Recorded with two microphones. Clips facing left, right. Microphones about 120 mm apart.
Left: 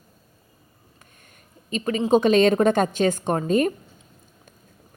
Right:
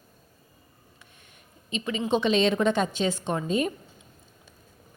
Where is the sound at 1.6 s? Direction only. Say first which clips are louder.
Left 6 dB; 45° left (ahead or behind).